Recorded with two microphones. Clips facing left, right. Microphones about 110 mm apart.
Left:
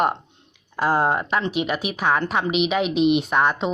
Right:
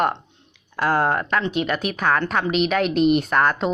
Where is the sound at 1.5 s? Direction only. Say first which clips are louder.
Right 1 dB; 10° left (ahead or behind).